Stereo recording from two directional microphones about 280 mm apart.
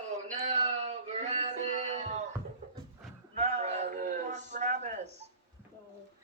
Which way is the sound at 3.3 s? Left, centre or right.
Right.